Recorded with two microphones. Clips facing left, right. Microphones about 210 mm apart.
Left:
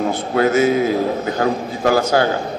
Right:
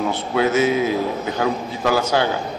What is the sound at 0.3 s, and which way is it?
A man's voice, 45° left (ahead or behind).